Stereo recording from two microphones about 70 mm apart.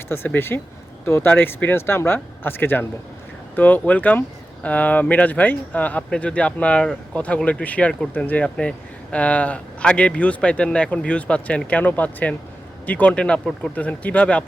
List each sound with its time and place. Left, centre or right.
0.3 s speech: left; by 14.4 s centre